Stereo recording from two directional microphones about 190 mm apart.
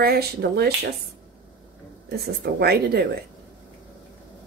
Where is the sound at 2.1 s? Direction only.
55° right (ahead or behind).